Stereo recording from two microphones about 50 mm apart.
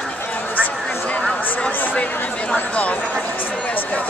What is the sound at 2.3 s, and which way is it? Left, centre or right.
Speech, left.